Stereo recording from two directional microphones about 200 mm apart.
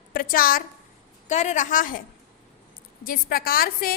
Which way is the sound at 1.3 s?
35° left (ahead or behind).